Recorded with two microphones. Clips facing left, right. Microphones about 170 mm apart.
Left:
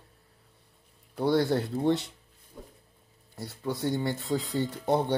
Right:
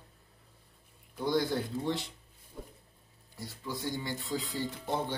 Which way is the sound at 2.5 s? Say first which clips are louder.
Even; centre (ahead or behind).